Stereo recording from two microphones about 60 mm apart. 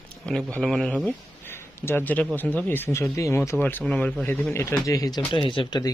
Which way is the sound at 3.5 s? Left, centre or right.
Left.